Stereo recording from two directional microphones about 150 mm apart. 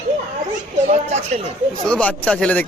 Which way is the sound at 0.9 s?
45° right (ahead or behind).